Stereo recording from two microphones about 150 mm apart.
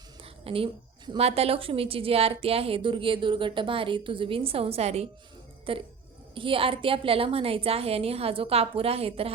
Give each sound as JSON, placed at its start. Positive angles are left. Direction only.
{"t": 0.4, "sound": "a woman's voice", "side_deg": -35}